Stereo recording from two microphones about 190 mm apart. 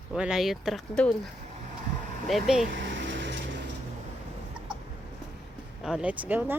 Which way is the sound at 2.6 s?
70° right (ahead or behind).